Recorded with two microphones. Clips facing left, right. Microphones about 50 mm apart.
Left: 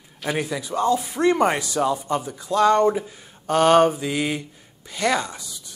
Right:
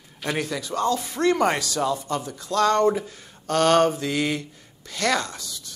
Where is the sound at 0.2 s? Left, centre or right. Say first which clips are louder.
Left 2 dB; centre.